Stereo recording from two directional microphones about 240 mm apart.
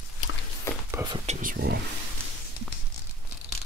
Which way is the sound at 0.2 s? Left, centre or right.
Left.